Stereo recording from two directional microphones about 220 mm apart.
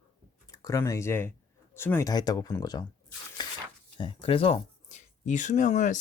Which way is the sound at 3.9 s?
25° left (ahead or behind).